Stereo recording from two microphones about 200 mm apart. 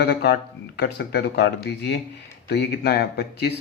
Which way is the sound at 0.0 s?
55° left (ahead or behind).